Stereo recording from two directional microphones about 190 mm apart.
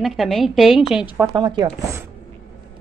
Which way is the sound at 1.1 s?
20° right (ahead or behind).